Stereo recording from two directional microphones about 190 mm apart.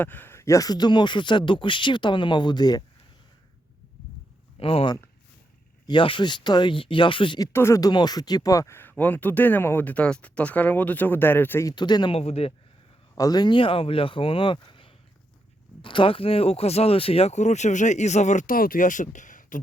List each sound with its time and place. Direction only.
0.0 s speech: 10° left (ahead or behind)
4.6 s speech: 30° left (ahead or behind); by 11.7 s 10° left (ahead or behind)
11.7 s speech: 25° left (ahead or behind)
13.1 s speech: 20° left (ahead or behind); by 19.6 s 45° left (ahead or behind)